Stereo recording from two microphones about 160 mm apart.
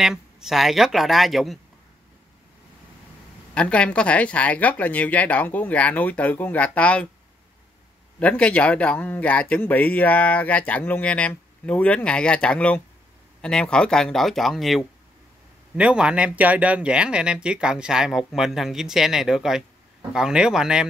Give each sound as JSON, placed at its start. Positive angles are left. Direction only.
{"t": 0.0, "sound": "speech", "side_deg": -5}
{"t": 3.5, "sound": "speech", "side_deg": 5}
{"t": 8.2, "sound": "speech", "side_deg": 10}